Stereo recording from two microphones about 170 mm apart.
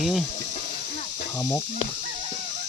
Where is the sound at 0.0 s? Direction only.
Centre (ahead or behind).